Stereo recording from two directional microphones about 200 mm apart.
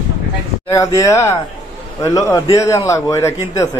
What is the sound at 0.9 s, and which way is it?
A man's voice, 15° left (ahead or behind).